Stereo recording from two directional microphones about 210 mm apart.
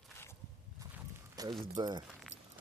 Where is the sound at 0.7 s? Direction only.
15° right (ahead or behind).